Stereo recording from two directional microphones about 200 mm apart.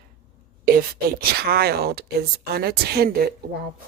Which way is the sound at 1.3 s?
50° right (ahead or behind).